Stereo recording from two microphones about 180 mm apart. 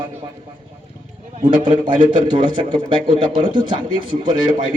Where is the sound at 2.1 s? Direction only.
25° right (ahead or behind).